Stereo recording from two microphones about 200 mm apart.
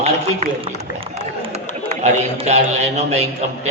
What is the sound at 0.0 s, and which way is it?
Run, 35° right (ahead or behind).